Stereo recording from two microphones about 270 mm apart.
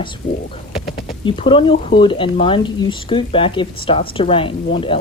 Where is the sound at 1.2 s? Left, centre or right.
Centre.